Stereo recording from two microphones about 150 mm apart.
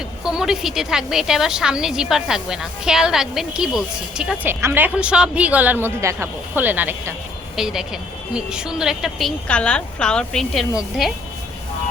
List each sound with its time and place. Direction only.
0.3 s a woman's voice: 5° right (ahead or behind)
4.4 s a woman's voice: 15° right (ahead or behind)